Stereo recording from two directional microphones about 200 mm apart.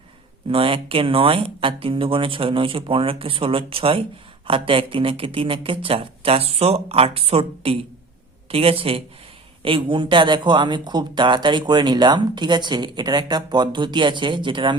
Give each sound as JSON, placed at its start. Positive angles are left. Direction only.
{"t": 0.4, "sound": "speech", "side_deg": -25}